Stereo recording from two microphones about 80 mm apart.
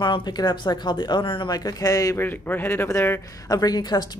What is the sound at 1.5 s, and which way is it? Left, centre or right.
Speech, left.